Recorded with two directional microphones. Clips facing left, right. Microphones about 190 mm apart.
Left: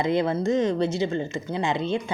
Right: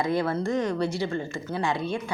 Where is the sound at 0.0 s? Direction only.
20° left (ahead or behind).